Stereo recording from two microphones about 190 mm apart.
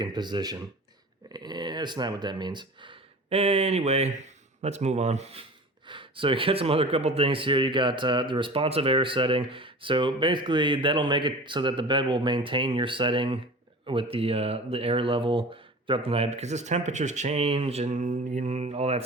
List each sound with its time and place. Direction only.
0.0 s speech: 20° right (ahead or behind)